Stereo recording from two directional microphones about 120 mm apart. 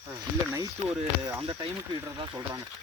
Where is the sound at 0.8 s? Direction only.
60° right (ahead or behind).